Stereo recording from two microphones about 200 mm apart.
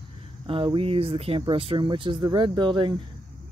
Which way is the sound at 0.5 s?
25° right (ahead or behind).